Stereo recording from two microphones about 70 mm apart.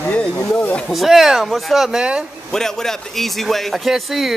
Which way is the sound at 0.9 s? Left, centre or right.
Centre.